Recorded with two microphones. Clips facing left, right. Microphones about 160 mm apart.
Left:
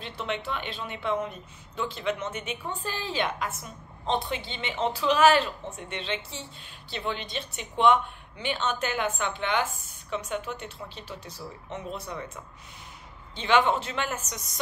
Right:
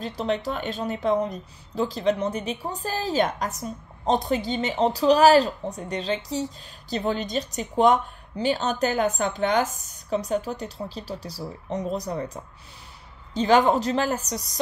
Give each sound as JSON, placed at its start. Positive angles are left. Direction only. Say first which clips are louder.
{"t": 0.0, "sound": "speech", "louder": "right 7 dB", "side_deg": -40}